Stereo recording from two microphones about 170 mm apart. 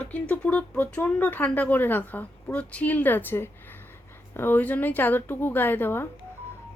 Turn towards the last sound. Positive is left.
turn(degrees=10)  # may be behind; listen again after turning